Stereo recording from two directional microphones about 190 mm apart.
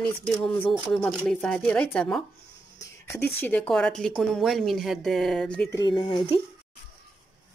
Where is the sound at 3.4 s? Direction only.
10° left (ahead or behind).